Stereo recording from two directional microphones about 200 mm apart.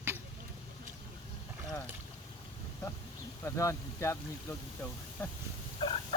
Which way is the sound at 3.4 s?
15° left (ahead or behind).